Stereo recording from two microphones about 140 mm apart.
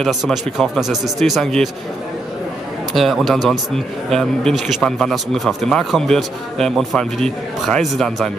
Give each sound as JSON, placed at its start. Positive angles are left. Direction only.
{"t": 0.0, "sound": "speech", "side_deg": 0}
{"t": 2.9, "sound": "speech", "side_deg": 0}